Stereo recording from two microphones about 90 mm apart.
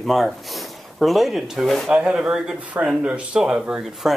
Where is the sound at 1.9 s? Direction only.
10° right (ahead or behind).